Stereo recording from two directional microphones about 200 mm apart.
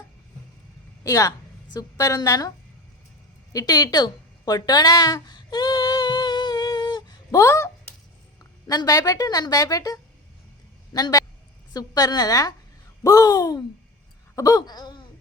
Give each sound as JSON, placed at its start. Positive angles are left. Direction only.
{"t": 1.0, "sound": "a woman's voice", "side_deg": 15}
{"t": 3.5, "sound": "a sound", "side_deg": 20}
{"t": 8.6, "sound": "a woman's voice", "side_deg": 20}